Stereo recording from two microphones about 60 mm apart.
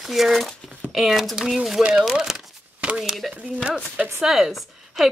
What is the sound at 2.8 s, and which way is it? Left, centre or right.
Speech, centre.